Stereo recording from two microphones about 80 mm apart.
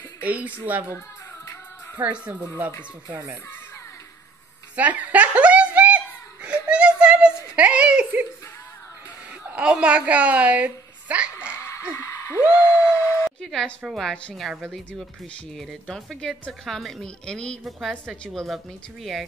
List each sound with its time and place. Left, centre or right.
0.2 s speech: centre
2.0 s speech: centre
4.7 s a sound: centre
9.6 s a woman's voice: centre
11.9 s a sound: left
13.2 s a sound: centre
13.8 s speech: centre
15.5 s speech: centre
16.2 s a woman's voice: centre